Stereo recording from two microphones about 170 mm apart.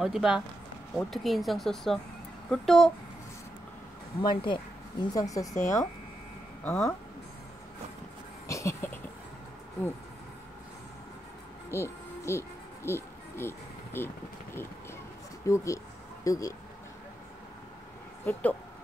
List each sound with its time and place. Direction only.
0.0 s speech: 5° right (ahead or behind)
4.2 s speech: 25° left (ahead or behind)
6.6 s speech: 10° left (ahead or behind)
8.5 s a sound: 15° left (ahead or behind)
11.7 s music: 15° left (ahead or behind)
15.4 s speech: 20° left (ahead or behind)
18.2 s speech: 10° left (ahead or behind)